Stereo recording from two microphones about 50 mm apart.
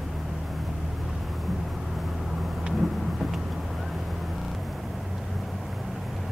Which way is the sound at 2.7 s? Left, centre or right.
Centre.